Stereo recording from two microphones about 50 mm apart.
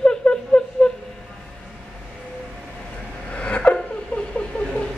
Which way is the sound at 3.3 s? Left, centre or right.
Left.